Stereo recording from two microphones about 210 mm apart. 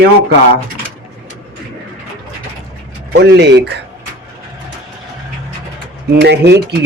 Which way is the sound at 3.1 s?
50° right (ahead or behind).